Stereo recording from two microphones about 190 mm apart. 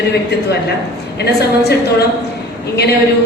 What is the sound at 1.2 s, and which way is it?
Speech, 60° left (ahead or behind).